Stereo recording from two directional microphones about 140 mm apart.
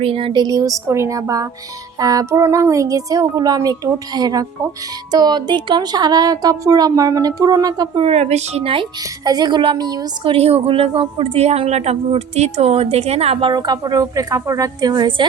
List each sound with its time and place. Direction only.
0.0 s speech: 40° right (ahead or behind)
8.0 s a woman's voice: 50° right (ahead or behind); by 10.3 s 30° right (ahead or behind)
10.3 s a woman's voice: 45° right (ahead or behind)
13.5 s speech: 30° right (ahead or behind)